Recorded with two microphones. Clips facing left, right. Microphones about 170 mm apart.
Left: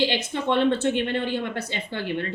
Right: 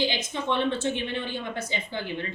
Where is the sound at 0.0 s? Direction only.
65° left (ahead or behind).